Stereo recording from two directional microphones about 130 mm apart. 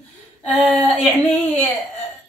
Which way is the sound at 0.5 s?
Centre (ahead or behind).